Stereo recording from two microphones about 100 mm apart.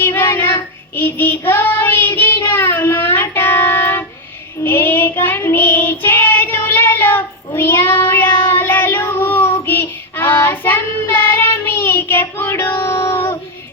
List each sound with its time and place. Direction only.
0.0 s child singing: 25° left (ahead or behind)